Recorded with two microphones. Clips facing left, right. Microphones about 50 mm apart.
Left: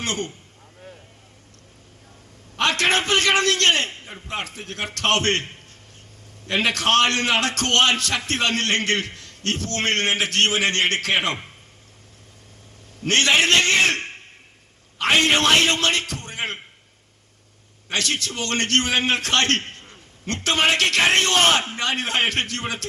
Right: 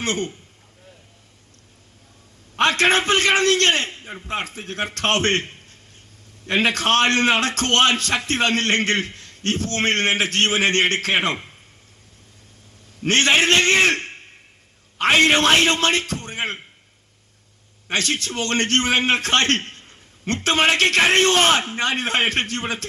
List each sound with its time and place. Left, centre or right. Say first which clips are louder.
0.0 s a man's voice: right 3 dB; right
2.6 s a man's voice: right 3 dB; right
13.1 s a man's voice: right 1 dB; right
17.8 s a man's voice: right 2 dB; right